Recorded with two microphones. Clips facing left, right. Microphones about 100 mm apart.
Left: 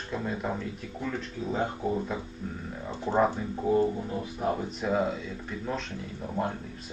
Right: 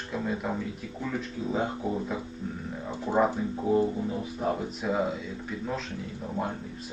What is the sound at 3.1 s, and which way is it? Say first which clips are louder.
A man's voice: even; 5° right (ahead or behind).